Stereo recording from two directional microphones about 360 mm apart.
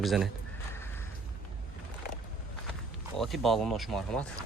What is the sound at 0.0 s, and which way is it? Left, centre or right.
Speech, centre.